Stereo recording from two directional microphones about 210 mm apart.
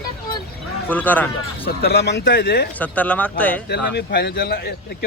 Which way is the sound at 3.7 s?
50° left (ahead or behind).